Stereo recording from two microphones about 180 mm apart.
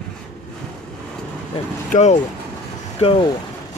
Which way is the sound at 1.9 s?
40° left (ahead or behind).